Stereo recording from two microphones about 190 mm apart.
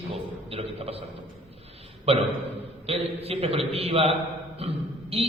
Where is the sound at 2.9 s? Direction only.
30° right (ahead or behind).